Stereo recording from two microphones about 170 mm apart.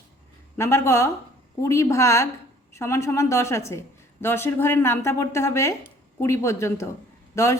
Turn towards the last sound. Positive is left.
turn(degrees=20)  # may be behind; listen again after turning